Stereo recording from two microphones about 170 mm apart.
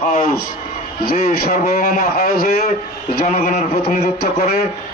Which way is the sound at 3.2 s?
45° left (ahead or behind).